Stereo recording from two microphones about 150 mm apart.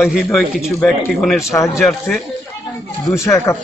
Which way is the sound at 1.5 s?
20° left (ahead or behind).